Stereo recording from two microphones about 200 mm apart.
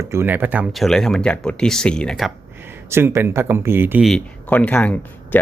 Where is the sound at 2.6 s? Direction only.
10° right (ahead or behind).